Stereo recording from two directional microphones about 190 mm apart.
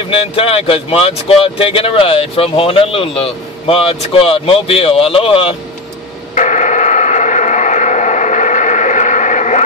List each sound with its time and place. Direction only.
0.1 s speech: 30° left (ahead or behind)
6.3 s radio: 40° left (ahead or behind)